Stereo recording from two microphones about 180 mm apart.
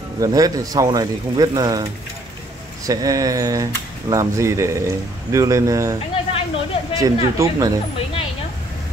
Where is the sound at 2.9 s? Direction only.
20° right (ahead or behind).